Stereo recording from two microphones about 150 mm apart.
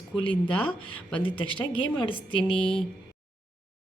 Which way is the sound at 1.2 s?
35° left (ahead or behind).